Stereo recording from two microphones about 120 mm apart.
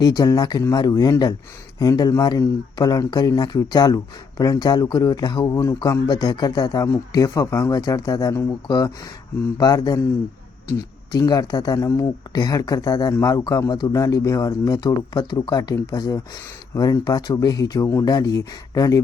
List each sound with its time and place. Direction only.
0.0 s speech: 30° left (ahead or behind)